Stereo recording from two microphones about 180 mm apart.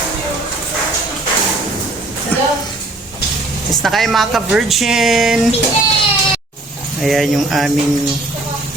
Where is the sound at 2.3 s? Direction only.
10° left (ahead or behind).